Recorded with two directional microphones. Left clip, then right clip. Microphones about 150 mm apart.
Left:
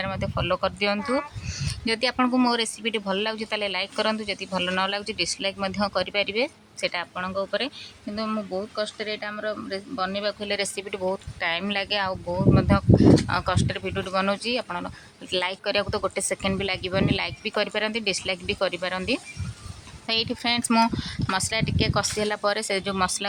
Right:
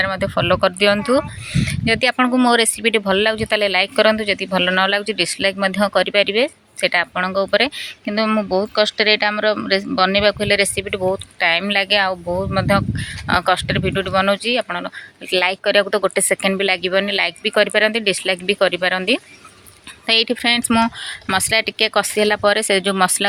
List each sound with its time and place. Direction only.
0.0 s speech: 20° right (ahead or behind)